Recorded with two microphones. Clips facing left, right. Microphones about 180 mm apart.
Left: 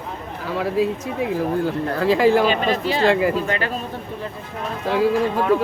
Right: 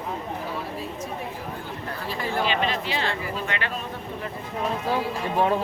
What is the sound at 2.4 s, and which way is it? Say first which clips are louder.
Speech: left 6 dB; 40° left (ahead or behind).